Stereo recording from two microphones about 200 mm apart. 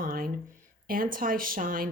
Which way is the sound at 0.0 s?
45° right (ahead or behind).